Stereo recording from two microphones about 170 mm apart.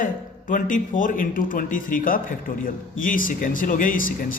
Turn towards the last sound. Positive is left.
turn(degrees=55)  # may be behind; listen again after turning